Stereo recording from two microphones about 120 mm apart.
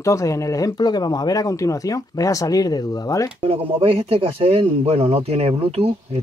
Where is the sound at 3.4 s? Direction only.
55° right (ahead or behind).